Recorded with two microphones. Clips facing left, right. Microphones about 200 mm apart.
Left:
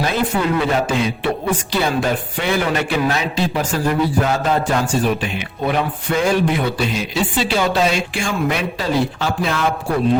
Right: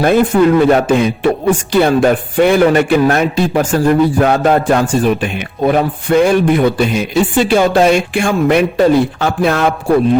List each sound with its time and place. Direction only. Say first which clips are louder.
0.6 s music: right 8 dB; 55° right (ahead or behind)